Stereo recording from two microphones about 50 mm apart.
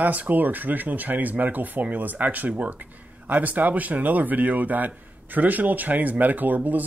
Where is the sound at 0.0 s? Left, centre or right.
Right.